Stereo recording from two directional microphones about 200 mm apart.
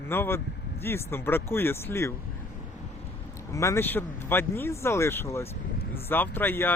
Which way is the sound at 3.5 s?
15° left (ahead or behind).